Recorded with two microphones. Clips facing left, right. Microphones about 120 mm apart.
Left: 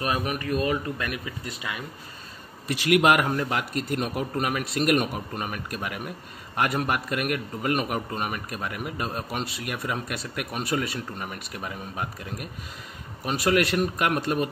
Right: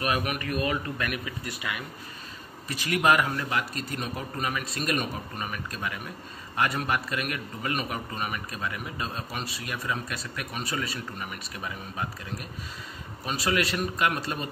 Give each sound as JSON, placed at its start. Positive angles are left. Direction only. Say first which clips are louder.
{"t": 0.0, "sound": "speech", "louder": "left 1 dB", "side_deg": 30}
{"t": 2.7, "sound": "speech", "louder": "left 4 dB", "side_deg": 75}
{"t": 3.3, "sound": "a man's voice", "louder": "left 3 dB", "side_deg": 55}
{"t": 13.2, "sound": "a man's voice", "louder": "left 5 dB", "side_deg": 55}